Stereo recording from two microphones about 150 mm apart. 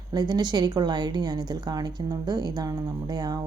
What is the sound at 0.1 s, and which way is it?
A woman's voice, 30° right (ahead or behind).